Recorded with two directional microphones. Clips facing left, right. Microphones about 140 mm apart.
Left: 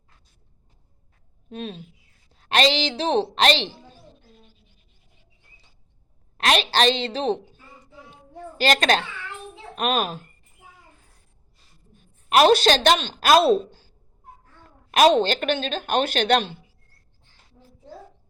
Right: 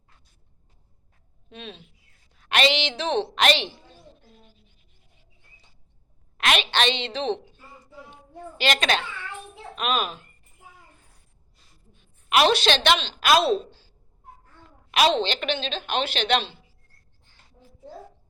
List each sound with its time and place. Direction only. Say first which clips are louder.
1.5 s a woman's voice: left 7 dB; 40° left (ahead or behind)
2.3 s a sound: left 3 dB; 35° left (ahead or behind)
2.7 s a woman's voice: left 3 dB; 35° left (ahead or behind)
6.3 s a woman's voice: left 3 dB; 35° left (ahead or behind)
8.1 s a sound: left 3 dB; 40° left (ahead or behind)
9.7 s a woman's voice: left 3 dB; 40° left (ahead or behind)
11.9 s a woman's voice: left 4 dB; 45° left (ahead or behind)